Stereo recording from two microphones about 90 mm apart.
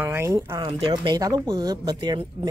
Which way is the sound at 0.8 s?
45° right (ahead or behind).